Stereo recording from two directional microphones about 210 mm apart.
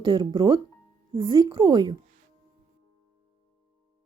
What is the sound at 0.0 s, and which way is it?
Speech, 20° right (ahead or behind).